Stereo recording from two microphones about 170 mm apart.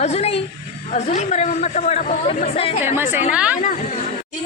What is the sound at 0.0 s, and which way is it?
A woman's voice, 40° left (ahead or behind).